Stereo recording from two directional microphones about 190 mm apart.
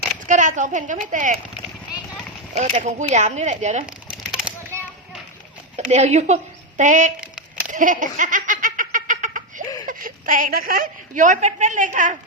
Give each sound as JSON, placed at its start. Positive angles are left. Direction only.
{"t": 0.3, "sound": "speech", "side_deg": -40}
{"t": 2.6, "sound": "speech", "side_deg": -35}
{"t": 3.8, "sound": "a sound", "side_deg": -5}
{"t": 5.9, "sound": "a woman's voice", "side_deg": -35}
{"t": 7.7, "sound": "laughter", "side_deg": -45}
{"t": 9.8, "sound": "a woman's voice", "side_deg": -45}